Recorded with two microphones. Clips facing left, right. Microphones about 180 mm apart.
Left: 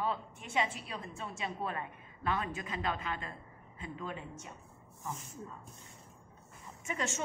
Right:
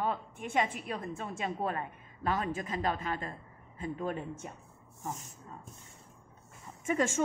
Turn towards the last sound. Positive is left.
turn(degrees=-50)  # may be behind; listen again after turning